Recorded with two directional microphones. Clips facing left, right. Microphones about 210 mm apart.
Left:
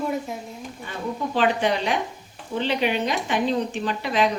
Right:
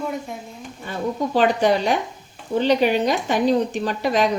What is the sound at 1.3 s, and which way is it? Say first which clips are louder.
A woman's voice: right 4 dB; 40° right (ahead or behind).